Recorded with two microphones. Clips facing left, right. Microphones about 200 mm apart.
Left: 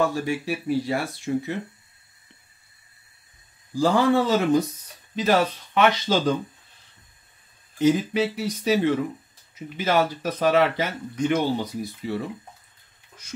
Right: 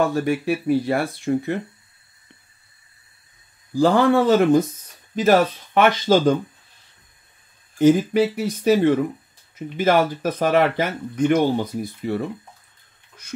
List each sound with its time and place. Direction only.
0.0 s speech: 60° right (ahead or behind)
3.7 s speech: 60° right (ahead or behind)
5.8 s speech: 50° right (ahead or behind)
7.8 s speech: 50° right (ahead or behind)
13.2 s speech: 60° right (ahead or behind)